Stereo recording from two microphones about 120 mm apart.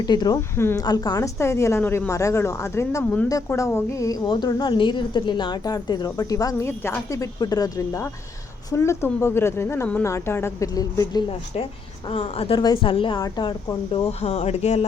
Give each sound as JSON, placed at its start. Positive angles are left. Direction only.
{"t": 0.0, "sound": "a woman's voice", "side_deg": 35}
{"t": 0.5, "sound": "speech", "side_deg": 20}
{"t": 0.9, "sound": "speech", "side_deg": 35}
{"t": 3.0, "sound": "speech", "side_deg": 15}
{"t": 3.2, "sound": "a woman's voice", "side_deg": 25}
{"t": 12.0, "sound": "a woman's voice", "side_deg": 50}
{"t": 12.5, "sound": "a woman's voice", "side_deg": 40}
{"t": 13.1, "sound": "speech", "side_deg": 35}